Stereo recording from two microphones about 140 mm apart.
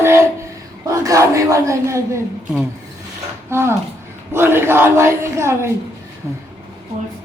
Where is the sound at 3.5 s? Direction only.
20° right (ahead or behind).